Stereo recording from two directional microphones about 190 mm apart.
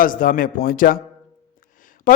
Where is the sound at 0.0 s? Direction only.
45° left (ahead or behind).